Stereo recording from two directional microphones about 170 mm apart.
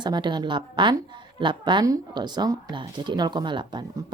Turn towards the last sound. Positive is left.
turn(degrees=-25)  # may be behind; listen again after turning